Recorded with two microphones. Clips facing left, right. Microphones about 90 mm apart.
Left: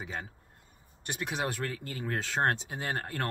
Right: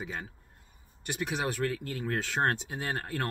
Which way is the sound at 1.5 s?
25° left (ahead or behind).